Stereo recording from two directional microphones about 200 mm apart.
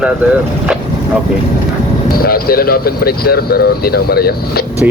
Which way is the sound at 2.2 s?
50° left (ahead or behind).